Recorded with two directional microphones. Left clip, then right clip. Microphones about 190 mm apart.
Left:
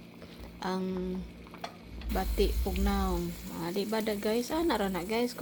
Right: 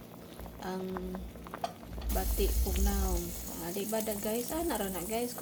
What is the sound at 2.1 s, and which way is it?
Speech, 45° left (ahead or behind).